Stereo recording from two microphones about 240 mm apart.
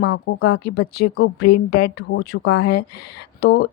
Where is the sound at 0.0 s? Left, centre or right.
Left.